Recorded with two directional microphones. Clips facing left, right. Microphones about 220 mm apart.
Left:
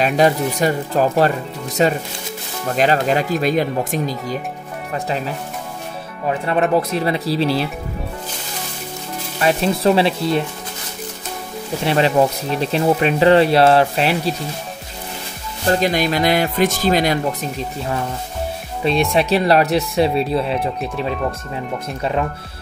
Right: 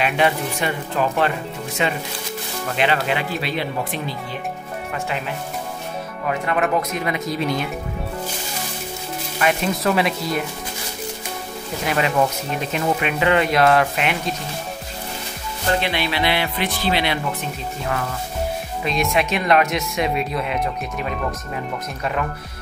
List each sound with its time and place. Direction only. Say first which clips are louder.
0.0 s speech: left 5 dB; 40° left (ahead or behind)
9.4 s speech: left 4 dB; 35° left (ahead or behind)
11.8 s speech: left 4 dB; 30° left (ahead or behind)
15.7 s speech: left 5 dB; 40° left (ahead or behind)
19.1 s speech: left 2 dB; 35° left (ahead or behind)